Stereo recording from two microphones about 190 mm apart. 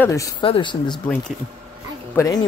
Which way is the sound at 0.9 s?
5° left (ahead or behind).